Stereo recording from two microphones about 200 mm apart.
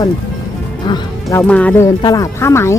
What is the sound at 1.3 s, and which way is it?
Speech, 5° left (ahead or behind).